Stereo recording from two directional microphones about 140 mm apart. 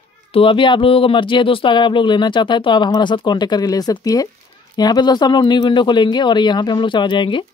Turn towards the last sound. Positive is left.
turn(degrees=35)  # may be behind; listen again after turning